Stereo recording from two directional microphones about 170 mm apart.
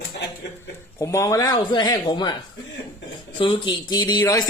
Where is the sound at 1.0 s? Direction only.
20° left (ahead or behind).